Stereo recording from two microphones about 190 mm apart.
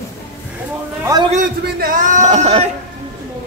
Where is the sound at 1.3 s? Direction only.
45° right (ahead or behind).